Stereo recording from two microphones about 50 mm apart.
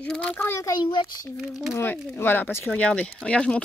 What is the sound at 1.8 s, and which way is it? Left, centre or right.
Speech, left.